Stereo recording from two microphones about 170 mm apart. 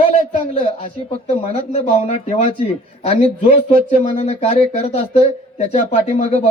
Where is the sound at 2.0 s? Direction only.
40° left (ahead or behind).